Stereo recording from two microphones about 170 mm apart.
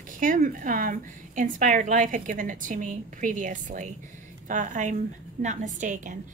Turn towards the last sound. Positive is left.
turn(degrees=-50)  # may be behind; listen again after turning